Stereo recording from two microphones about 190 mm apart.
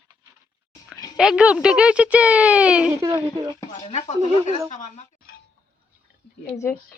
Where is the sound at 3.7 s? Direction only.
25° left (ahead or behind).